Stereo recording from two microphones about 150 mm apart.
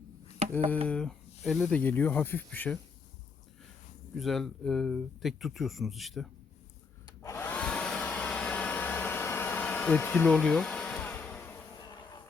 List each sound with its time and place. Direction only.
0.4 s a sound: 45° right (ahead or behind)
0.9 s speech: 5° left (ahead or behind)
4.1 s speech: centre (ahead or behind)
7.2 s hair dryer: 15° left (ahead or behind)